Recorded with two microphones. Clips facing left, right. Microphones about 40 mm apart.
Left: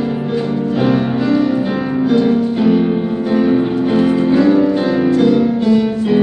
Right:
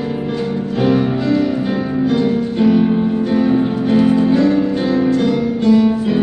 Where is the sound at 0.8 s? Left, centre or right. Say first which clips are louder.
Right 1 dB; centre.